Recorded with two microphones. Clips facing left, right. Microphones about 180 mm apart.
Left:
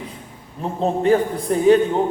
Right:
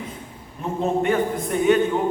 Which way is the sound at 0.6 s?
35° left (ahead or behind).